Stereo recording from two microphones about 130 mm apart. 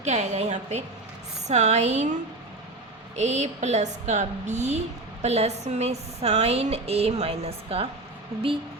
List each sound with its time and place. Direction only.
0.0 s speech: 60° right (ahead or behind)
3.2 s speech: 60° right (ahead or behind)